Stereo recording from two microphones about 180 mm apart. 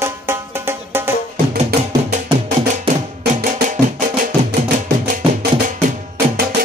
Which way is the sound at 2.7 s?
40° right (ahead or behind).